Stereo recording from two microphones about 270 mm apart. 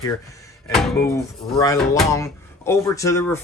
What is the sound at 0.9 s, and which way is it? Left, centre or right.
Speech, centre.